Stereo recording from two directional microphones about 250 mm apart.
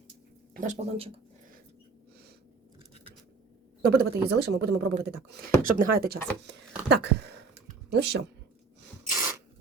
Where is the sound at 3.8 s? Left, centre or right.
Right.